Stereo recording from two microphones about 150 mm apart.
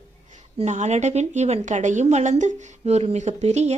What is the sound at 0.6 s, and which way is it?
A woman's voice, 50° right (ahead or behind).